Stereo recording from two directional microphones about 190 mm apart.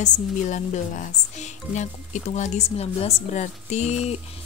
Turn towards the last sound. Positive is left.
turn(degrees=40)  # may be behind; listen again after turning